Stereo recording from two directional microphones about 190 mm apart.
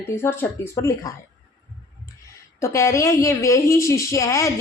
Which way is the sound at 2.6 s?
15° left (ahead or behind).